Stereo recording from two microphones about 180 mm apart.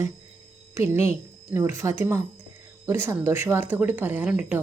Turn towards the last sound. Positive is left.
turn(degrees=-10)  # may be behind; listen again after turning